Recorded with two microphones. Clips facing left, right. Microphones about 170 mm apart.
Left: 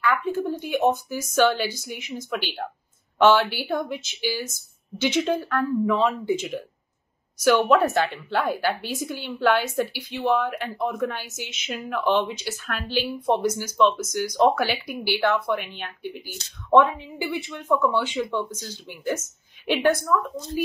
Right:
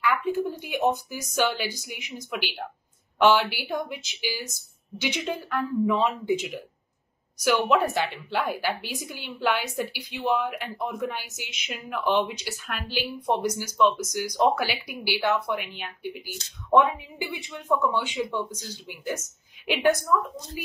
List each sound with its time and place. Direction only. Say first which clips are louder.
0.0 s a woman's voice: left 1 dB; 15° right (ahead or behind)
7.9 s a woman's voice: left 4 dB; 15° right (ahead or behind)